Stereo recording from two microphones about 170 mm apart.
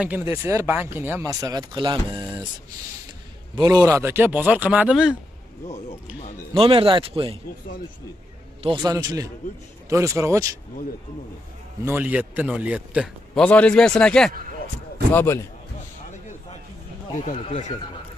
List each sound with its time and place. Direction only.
0.0 s speech: 10° right (ahead or behind)
3.8 s speech: 15° right (ahead or behind)
6.5 s speech: 35° right (ahead or behind)
8.6 s a man's voice: 25° right (ahead or behind)
11.8 s speech: 10° right (ahead or behind)
13.4 s speech: 5° left (ahead or behind)
15.1 s a man's voice: 15° left (ahead or behind)
17.2 s speech: 40° left (ahead or behind)